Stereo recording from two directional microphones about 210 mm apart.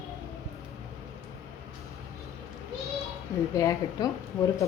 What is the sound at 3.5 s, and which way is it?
Speech, 15° left (ahead or behind).